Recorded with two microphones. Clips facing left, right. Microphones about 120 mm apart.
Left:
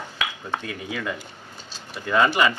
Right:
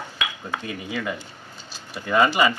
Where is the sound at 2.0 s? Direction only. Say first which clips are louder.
Right 1 dB; 10° right (ahead or behind).